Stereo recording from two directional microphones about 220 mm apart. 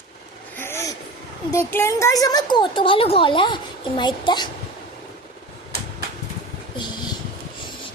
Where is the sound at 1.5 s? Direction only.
10° left (ahead or behind).